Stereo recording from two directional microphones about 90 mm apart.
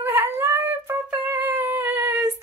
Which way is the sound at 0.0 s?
25° right (ahead or behind).